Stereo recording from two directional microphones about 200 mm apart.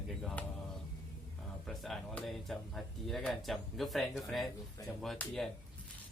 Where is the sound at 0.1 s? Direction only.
Centre (ahead or behind).